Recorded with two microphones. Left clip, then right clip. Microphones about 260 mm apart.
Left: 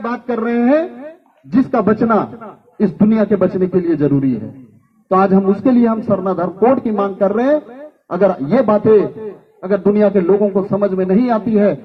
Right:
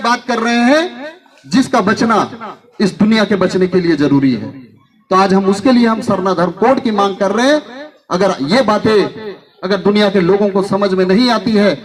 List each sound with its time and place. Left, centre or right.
0.0 s a man's voice: right